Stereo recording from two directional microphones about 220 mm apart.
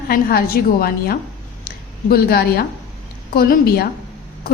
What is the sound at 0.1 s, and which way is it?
A woman's voice, 45° left (ahead or behind).